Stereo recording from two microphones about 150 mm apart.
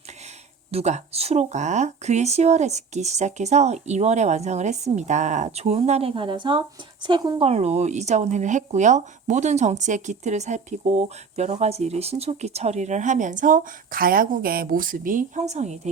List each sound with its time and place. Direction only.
0.7 s speech: 45° right (ahead or behind)